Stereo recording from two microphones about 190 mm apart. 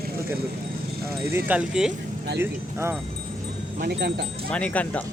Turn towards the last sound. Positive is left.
turn(degrees=5)  # may be behind; listen again after turning